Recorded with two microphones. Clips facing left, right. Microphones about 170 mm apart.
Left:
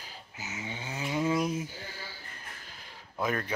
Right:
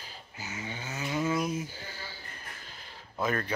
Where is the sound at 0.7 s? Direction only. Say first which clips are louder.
Left 1 dB; 15° left (ahead or behind).